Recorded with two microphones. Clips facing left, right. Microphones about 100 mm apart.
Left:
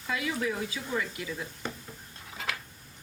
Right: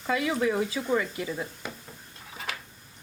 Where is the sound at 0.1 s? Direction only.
45° right (ahead or behind).